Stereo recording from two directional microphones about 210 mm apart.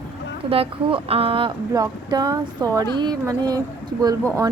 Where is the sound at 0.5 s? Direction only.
25° right (ahead or behind).